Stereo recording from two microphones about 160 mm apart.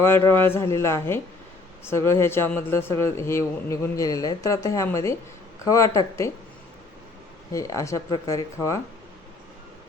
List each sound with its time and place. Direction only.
0.0 s speech: 15° left (ahead or behind)
7.5 s speech: 20° left (ahead or behind)